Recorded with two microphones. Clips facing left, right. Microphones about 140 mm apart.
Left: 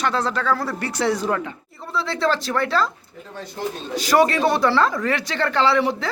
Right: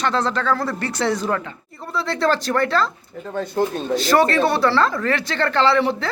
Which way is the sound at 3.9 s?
10° left (ahead or behind).